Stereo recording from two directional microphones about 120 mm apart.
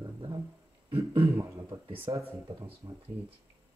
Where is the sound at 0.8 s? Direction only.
45° right (ahead or behind).